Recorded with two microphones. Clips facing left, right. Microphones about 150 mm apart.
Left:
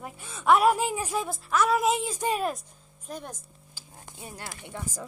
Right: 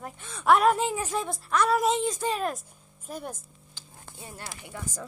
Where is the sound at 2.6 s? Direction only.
5° right (ahead or behind).